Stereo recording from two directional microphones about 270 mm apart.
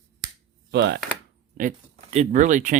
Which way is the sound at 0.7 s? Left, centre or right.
Right.